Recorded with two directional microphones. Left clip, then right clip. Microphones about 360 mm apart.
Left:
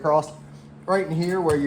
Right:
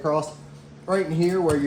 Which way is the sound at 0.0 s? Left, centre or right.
Centre.